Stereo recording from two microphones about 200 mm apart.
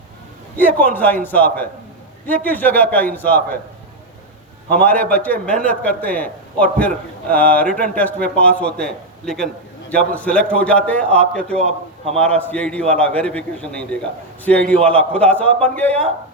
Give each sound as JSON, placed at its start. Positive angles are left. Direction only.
{"t": 0.5, "sound": "a man's voice", "side_deg": 10}
{"t": 4.7, "sound": "a man's voice", "side_deg": 5}